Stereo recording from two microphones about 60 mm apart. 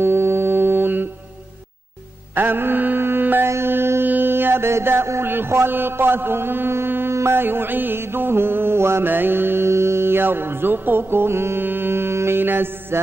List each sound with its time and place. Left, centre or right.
0.0 s mantra: right
2.3 s mantra: right
3.4 s music: right
4.1 s mantra: right
9.1 s music: right